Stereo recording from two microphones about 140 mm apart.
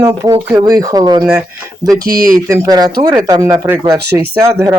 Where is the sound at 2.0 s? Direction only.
90° right.